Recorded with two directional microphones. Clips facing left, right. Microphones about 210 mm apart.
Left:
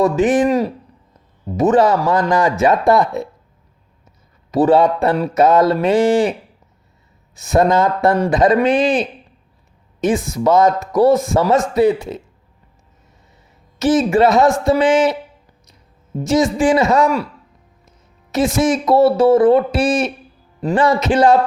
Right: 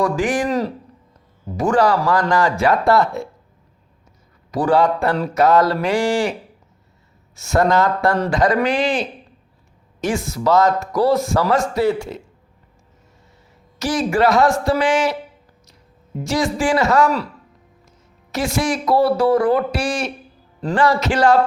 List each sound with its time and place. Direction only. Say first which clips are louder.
0.0 s speech: left 5 dB; 20° left (ahead or behind)
4.5 s speech: left 4 dB; 25° left (ahead or behind)
7.3 s speech: left 2 dB; 15° left (ahead or behind)
13.7 s speech: left 5 dB; 20° left (ahead or behind)
18.3 s speech: left 5 dB; 20° left (ahead or behind)